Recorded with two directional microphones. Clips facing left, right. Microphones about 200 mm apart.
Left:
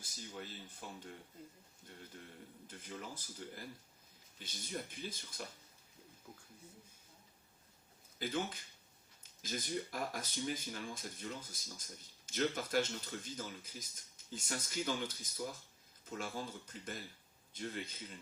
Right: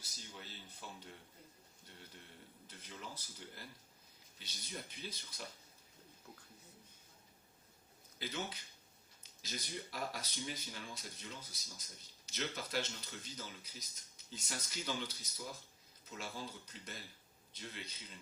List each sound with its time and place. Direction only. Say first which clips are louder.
0.4 s speech: left 3 dB; 50° left (ahead or behind)
2.6 s speech: left 4 dB; 50° left (ahead or behind)
8.2 s speech: left 5 dB; 50° left (ahead or behind)